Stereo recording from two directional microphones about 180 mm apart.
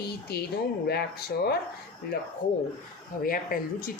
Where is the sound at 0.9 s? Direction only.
60° left (ahead or behind).